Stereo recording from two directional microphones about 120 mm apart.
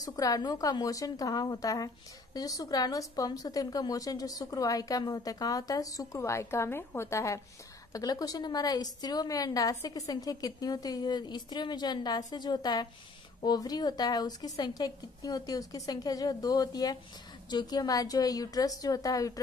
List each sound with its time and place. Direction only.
0.0 s a woman's voice: 30° left (ahead or behind)